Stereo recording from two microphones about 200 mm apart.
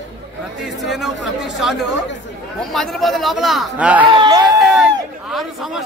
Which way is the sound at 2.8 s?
Centre (ahead or behind).